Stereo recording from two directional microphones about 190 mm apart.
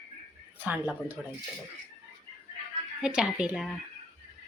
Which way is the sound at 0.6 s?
10° right (ahead or behind).